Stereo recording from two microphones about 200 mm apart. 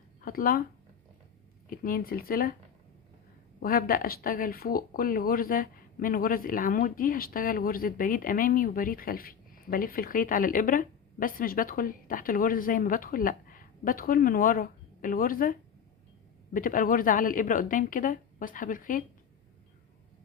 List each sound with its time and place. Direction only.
0.2 s speech: 45° left (ahead or behind)
1.7 s speech: 45° left (ahead or behind)
3.6 s speech: 45° left (ahead or behind)